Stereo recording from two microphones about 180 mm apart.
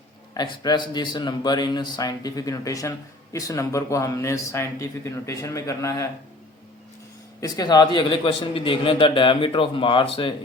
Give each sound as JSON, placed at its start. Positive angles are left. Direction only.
{"t": 0.3, "sound": "a man's voice", "side_deg": 25}
{"t": 7.4, "sound": "a man's voice", "side_deg": 20}